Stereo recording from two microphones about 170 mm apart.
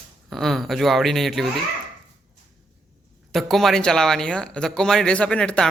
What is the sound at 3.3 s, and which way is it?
Speech, centre (ahead or behind).